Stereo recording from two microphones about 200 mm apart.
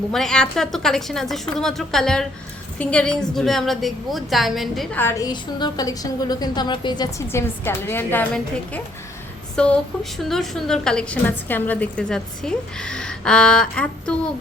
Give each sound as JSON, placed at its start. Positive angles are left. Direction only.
{"t": 0.1, "sound": "a woman's voice", "side_deg": 0}
{"t": 4.9, "sound": "a woman's voice", "side_deg": 15}
{"t": 9.6, "sound": "a woman's voice", "side_deg": 5}